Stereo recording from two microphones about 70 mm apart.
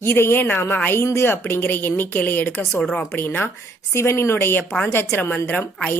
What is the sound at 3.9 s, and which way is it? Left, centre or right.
Speech, left.